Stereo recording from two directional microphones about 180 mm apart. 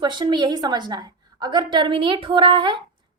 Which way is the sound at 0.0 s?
25° right (ahead or behind).